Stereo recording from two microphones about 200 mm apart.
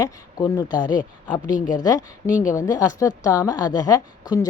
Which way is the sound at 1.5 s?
40° left (ahead or behind).